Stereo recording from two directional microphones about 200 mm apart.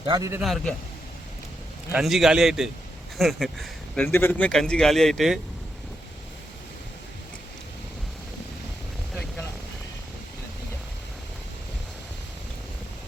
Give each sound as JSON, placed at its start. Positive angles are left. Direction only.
{"t": 0.0, "sound": "a man's voice", "side_deg": -20}
{"t": 0.4, "sound": "speech", "side_deg": 0}
{"t": 1.9, "sound": "speech", "side_deg": 0}